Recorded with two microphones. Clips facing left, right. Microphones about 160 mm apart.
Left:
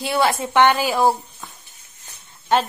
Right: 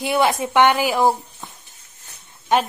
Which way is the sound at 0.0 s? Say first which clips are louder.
Right 1 dB; 20° right (ahead or behind).